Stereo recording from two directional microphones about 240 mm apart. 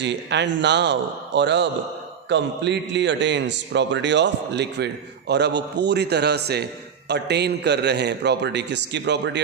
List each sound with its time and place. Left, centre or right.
0.0 s a man's voice: right